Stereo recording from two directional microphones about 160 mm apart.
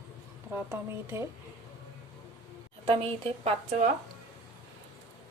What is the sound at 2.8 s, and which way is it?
Speech, 35° right (ahead or behind).